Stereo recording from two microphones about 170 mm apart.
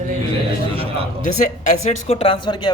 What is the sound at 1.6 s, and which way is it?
A man's voice, 40° left (ahead or behind).